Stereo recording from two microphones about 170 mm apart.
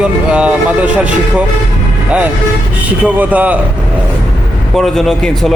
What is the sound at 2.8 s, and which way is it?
Speech, 10° right (ahead or behind).